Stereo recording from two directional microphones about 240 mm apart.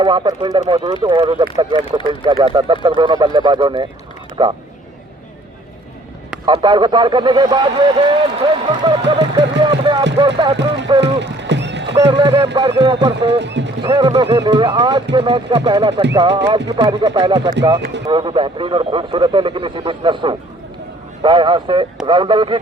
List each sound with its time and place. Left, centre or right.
0.0 s a man's voice: centre
6.4 s a man's voice: centre
9.0 s a sound: centre
10.2 s speech: centre
11.0 s a sound: right
12.1 s speech: centre
13.4 s a sound: right
13.8 s a man's voice: centre
17.7 s speech: right
18.0 s a man's voice: centre